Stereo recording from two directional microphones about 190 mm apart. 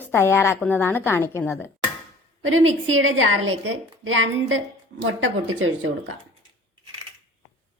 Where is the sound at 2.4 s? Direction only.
90° right.